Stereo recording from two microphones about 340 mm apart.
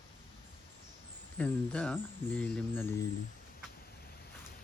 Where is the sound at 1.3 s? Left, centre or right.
Centre.